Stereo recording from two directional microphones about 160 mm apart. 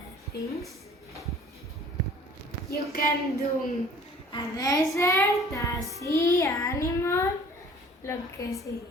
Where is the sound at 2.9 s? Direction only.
70° left (ahead or behind).